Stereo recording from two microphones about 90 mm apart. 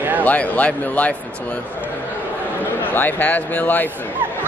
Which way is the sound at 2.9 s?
20° left (ahead or behind).